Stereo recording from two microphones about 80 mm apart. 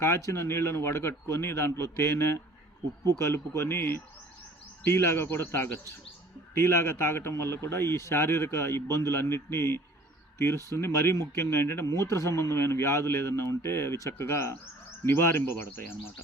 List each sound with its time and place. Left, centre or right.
0.0 s speech: left